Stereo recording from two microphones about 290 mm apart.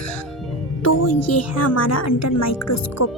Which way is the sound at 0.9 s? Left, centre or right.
Left.